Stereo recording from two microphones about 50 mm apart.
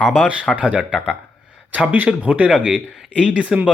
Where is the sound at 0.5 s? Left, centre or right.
Right.